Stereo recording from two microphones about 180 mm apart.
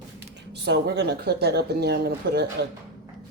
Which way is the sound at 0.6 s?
65° right (ahead or behind).